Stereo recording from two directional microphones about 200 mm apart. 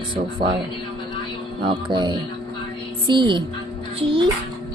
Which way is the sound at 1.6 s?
25° right (ahead or behind).